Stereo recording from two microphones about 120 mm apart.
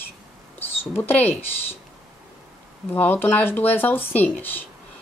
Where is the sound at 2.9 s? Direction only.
15° left (ahead or behind).